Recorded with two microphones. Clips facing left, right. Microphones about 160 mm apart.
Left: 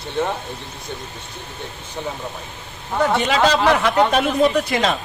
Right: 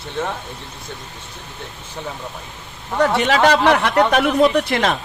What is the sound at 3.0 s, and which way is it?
Speech, 70° right (ahead or behind).